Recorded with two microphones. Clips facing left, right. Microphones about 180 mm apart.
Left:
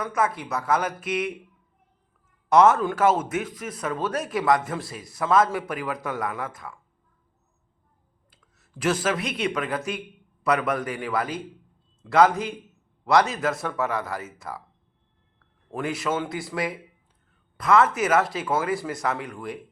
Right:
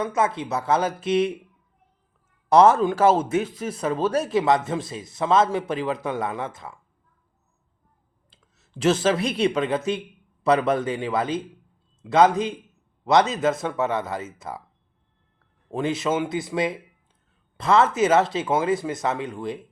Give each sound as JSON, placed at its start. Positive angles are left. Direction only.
{"t": 0.0, "sound": "a man's voice", "side_deg": -25}
{"t": 2.5, "sound": "a man's voice", "side_deg": -30}
{"t": 8.3, "sound": "a man's voice", "side_deg": -25}
{"t": 15.7, "sound": "a man's voice", "side_deg": -20}